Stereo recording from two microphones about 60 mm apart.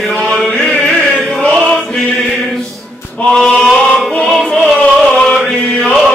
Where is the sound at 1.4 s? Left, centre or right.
Centre.